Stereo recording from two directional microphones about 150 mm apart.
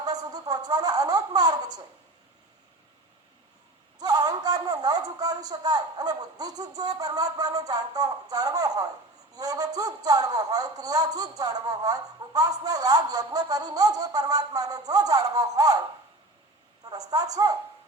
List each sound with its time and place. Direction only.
0.0 s speech: 25° right (ahead or behind)
3.9 s a man's voice: 25° right (ahead or behind)
16.9 s a man's voice: 25° right (ahead or behind)